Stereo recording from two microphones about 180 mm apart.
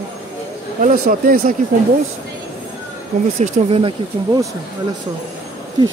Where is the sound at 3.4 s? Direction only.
35° right (ahead or behind).